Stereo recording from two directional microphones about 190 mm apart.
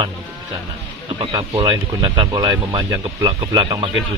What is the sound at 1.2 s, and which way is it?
Speech, 25° right (ahead or behind).